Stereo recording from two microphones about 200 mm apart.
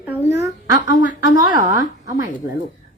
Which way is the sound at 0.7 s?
40° left (ahead or behind).